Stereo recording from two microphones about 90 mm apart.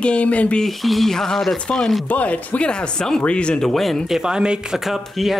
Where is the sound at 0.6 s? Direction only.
Centre (ahead or behind).